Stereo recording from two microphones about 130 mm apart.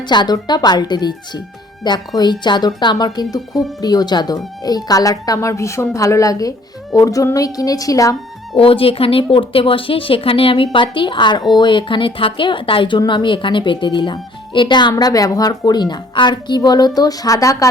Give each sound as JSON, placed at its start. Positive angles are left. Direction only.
{"t": 0.0, "sound": "a woman's voice", "side_deg": 35}
{"t": 8.5, "sound": "speech", "side_deg": 45}